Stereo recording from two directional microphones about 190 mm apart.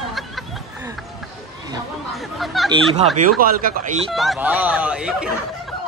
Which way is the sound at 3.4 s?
50° right (ahead or behind).